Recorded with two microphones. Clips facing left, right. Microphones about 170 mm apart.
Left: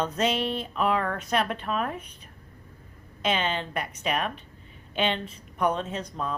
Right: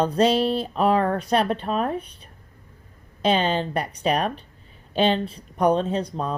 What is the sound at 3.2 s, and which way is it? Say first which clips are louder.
Speech: right 6 dB; 35° right (ahead or behind).